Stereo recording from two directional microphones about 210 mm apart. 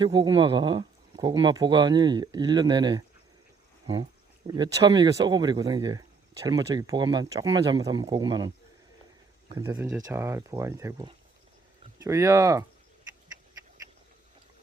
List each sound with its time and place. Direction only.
0.0 s speech: 20° right (ahead or behind)
4.4 s speech: 20° right (ahead or behind)
9.5 s speech: 20° right (ahead or behind)